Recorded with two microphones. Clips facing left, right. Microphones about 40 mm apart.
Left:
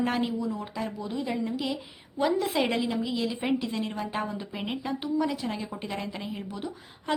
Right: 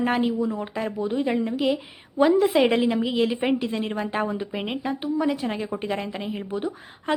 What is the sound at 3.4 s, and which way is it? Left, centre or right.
A woman's voice, right.